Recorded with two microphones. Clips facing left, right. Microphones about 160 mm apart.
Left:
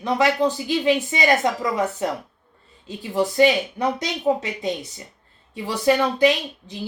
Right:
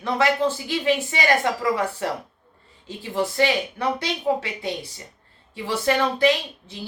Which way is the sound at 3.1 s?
20° left (ahead or behind).